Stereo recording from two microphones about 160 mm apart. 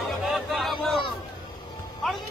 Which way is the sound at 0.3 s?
Centre (ahead or behind).